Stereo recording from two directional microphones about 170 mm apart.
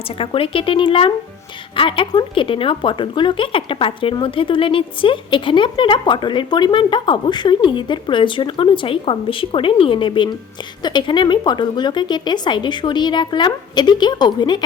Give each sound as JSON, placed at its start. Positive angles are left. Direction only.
{"t": 0.2, "sound": "speech", "side_deg": 30}